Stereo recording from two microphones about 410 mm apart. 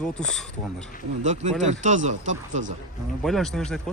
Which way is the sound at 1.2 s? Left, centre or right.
Centre.